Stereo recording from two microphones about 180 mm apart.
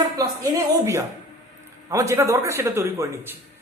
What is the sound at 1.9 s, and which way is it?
A man's voice, 15° right (ahead or behind).